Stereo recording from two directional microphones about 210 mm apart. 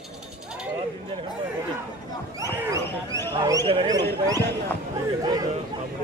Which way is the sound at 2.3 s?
15° right (ahead or behind).